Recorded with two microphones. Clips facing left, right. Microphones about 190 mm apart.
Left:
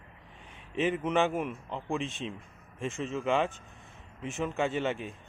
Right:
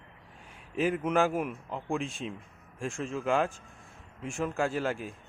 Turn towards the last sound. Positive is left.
turn(degrees=0)  # may be behind; listen again after turning